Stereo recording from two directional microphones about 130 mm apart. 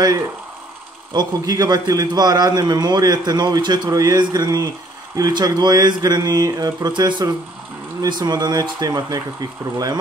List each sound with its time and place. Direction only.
1.1 s a man's voice: 25° right (ahead or behind)